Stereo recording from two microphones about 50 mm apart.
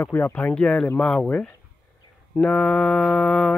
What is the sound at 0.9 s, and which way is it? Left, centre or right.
Mantra, centre.